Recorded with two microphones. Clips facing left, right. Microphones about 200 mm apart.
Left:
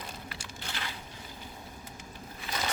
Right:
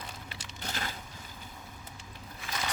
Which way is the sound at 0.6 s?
45° right (ahead or behind).